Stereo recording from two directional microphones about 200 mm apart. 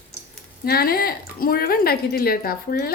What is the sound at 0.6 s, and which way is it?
A woman's voice, 50° left (ahead or behind).